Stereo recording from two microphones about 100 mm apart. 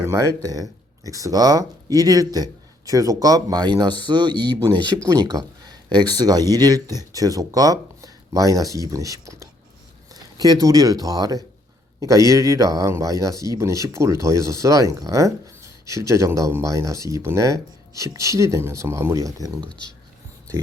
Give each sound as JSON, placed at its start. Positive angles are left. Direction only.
{"t": 0.0, "sound": "speech", "side_deg": -30}
{"t": 5.0, "sound": "speech", "side_deg": -35}